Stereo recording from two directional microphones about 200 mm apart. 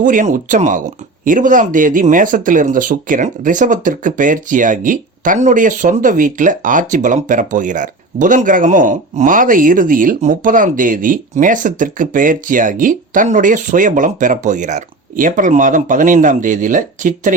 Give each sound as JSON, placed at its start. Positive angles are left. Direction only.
{"t": 0.0, "sound": "speech", "side_deg": -40}